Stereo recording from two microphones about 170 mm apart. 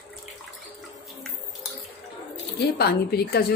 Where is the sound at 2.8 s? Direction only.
70° left (ahead or behind).